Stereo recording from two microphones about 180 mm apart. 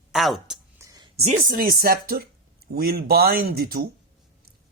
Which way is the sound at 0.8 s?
20° right (ahead or behind).